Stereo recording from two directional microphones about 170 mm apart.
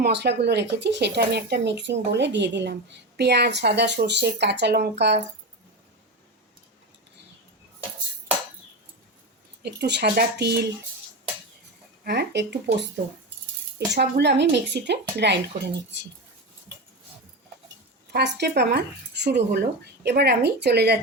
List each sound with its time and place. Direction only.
0.0 s speech: 80° right
3.2 s speech: 75° right (ahead or behind)
9.8 s speech: 85° right
12.0 s speech: 85° right
13.7 s speech: 80° right
18.1 s speech: 80° right